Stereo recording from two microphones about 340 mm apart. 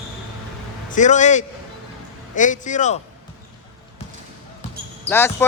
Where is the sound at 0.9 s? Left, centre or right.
Left.